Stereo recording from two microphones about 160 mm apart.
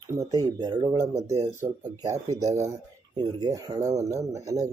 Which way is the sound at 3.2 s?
25° right (ahead or behind).